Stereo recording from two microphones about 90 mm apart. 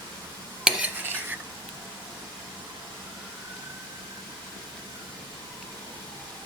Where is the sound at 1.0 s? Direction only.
20° right (ahead or behind).